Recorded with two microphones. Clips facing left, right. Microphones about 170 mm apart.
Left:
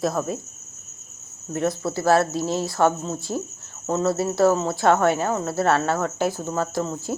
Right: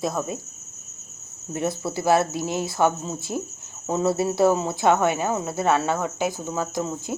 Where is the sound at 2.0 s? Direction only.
20° right (ahead or behind).